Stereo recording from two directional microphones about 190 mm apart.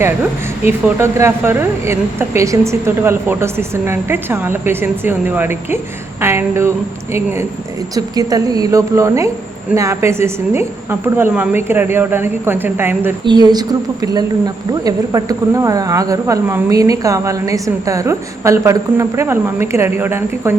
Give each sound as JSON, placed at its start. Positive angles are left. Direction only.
{"t": 0.7, "sound": "a woman's voice", "side_deg": -10}
{"t": 13.2, "sound": "a woman's voice", "side_deg": -20}